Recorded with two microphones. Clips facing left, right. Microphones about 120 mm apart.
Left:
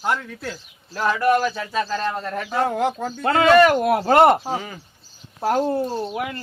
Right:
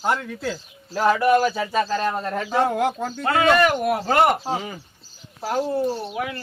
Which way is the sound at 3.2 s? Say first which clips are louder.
Left 4 dB; 35° left (ahead or behind).